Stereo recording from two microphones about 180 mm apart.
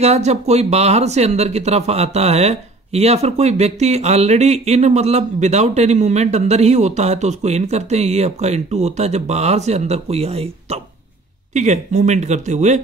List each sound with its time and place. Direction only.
0.0 s speech: 35° right (ahead or behind)